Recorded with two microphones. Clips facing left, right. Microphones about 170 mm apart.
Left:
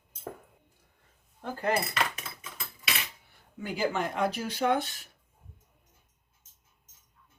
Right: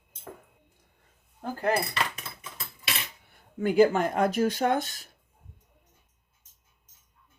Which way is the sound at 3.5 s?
50° right (ahead or behind).